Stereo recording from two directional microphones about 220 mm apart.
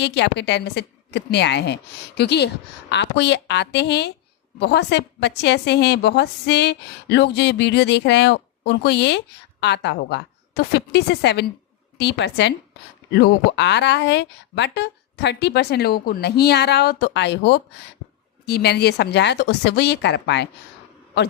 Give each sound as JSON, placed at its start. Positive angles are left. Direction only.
{"t": 0.0, "sound": "a woman's voice", "side_deg": 50}